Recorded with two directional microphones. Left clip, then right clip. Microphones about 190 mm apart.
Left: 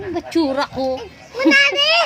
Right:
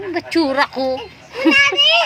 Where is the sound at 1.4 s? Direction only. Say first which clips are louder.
Right 1 dB; 15° left (ahead or behind).